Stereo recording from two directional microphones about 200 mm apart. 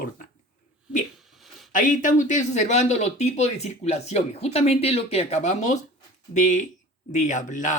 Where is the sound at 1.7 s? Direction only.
40° left (ahead or behind).